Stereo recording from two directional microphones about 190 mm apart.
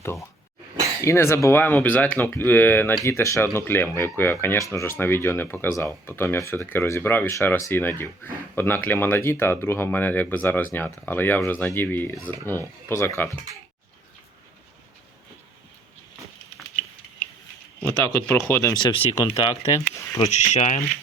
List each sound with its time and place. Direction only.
0.0 s speech: 15° left (ahead or behind)
18.0 s speech: 15° left (ahead or behind)
20.1 s speech: 35° left (ahead or behind)